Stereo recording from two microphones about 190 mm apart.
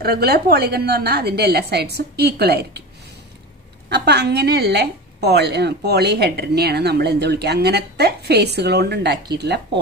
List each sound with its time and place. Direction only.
0.0 s a woman's voice: 55° right (ahead or behind)
3.9 s a woman's voice: 60° right (ahead or behind)